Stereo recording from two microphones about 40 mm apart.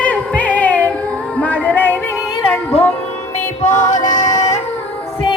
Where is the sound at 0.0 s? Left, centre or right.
Left.